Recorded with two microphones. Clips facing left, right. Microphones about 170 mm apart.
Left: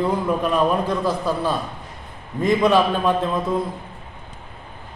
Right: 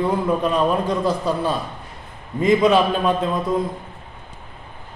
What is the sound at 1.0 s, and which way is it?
Speech, centre (ahead or behind).